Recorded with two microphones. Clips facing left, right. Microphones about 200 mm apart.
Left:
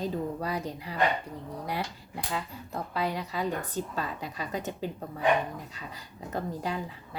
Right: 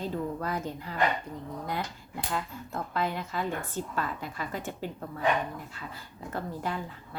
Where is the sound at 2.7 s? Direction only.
15° left (ahead or behind).